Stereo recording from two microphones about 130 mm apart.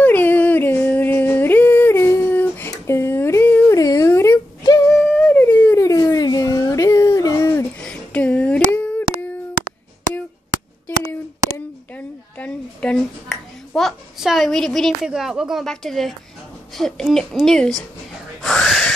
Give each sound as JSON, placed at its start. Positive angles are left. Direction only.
{"t": 0.0, "sound": "a sound", "side_deg": 15}
{"t": 4.8, "sound": "dog", "side_deg": 10}
{"t": 7.8, "sound": "a sound", "side_deg": 10}
{"t": 11.9, "sound": "finger snapping", "side_deg": 10}
{"t": 15.0, "sound": "speech", "side_deg": -5}
{"t": 18.4, "sound": "gasp", "side_deg": 0}